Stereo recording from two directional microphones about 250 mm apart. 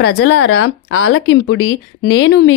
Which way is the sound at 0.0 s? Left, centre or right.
Left.